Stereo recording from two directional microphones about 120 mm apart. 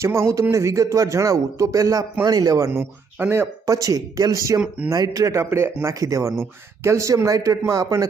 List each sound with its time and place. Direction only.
0.0 s speech: 20° right (ahead or behind)